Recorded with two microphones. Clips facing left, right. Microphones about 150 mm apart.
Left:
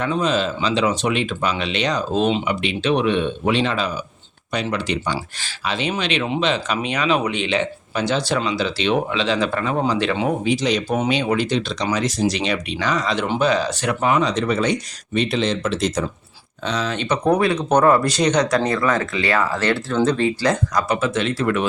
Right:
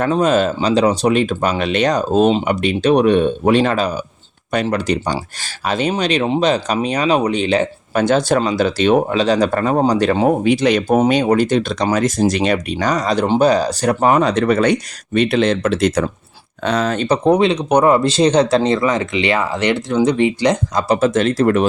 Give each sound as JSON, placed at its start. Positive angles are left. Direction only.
{"t": 0.0, "sound": "speech", "side_deg": -45}
{"t": 10.4, "sound": "speech", "side_deg": -60}
{"t": 16.6, "sound": "speech", "side_deg": -50}
{"t": 17.2, "sound": "speech", "side_deg": -20}
{"t": 20.8, "sound": "speech", "side_deg": -35}